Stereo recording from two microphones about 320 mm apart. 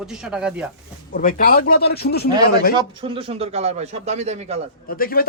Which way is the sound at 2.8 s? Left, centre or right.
Centre.